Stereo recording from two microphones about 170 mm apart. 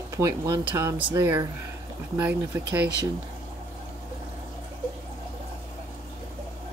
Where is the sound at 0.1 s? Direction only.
20° right (ahead or behind).